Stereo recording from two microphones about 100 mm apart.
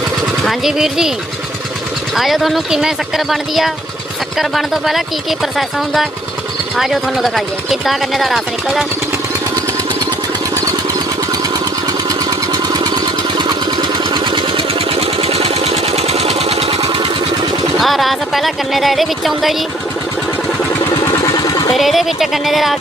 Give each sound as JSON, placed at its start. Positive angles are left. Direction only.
{"t": 0.4, "sound": "speech", "side_deg": -5}
{"t": 2.1, "sound": "speech", "side_deg": 0}
{"t": 11.9, "sound": "vehicle", "side_deg": -40}
{"t": 13.4, "sound": "engine", "side_deg": -50}
{"t": 16.8, "sound": "a sound", "side_deg": -60}
{"t": 17.7, "sound": "speech", "side_deg": 0}
{"t": 20.9, "sound": "a sound", "side_deg": 40}
{"t": 21.8, "sound": "speech", "side_deg": 0}